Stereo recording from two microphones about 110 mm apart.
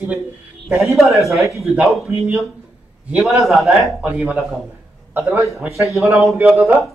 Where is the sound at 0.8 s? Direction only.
Centre (ahead or behind).